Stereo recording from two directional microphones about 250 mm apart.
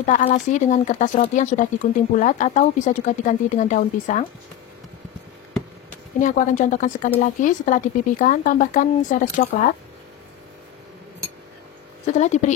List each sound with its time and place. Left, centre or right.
0.0 s speech: left
6.2 s speech: left
12.1 s speech: left